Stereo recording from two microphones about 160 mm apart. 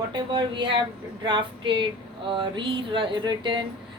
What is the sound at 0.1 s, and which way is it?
A woman's voice, 30° right (ahead or behind).